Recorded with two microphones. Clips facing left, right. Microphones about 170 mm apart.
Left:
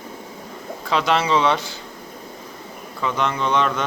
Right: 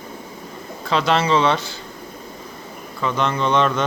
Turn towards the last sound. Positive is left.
turn(degrees=10)  # may be behind; listen again after turning